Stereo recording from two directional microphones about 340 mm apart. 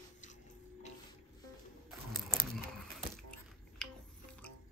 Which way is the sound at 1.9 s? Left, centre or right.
Centre.